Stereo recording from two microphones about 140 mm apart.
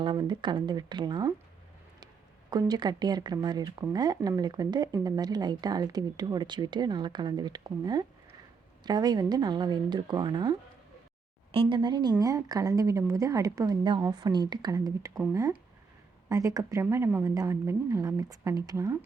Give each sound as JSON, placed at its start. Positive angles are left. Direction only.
{"t": 0.0, "sound": "speech", "side_deg": -35}
{"t": 2.5, "sound": "speech", "side_deg": -30}